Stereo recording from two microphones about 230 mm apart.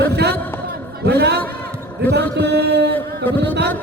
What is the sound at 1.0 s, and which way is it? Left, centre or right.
Chant, right.